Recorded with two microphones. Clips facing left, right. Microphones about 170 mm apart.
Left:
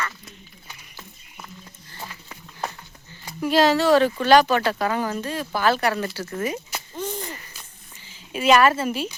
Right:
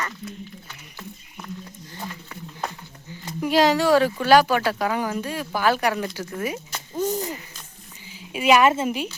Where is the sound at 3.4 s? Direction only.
15° right (ahead or behind).